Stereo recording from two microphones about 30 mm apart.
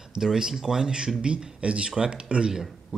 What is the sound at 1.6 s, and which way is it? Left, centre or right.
Speech, right.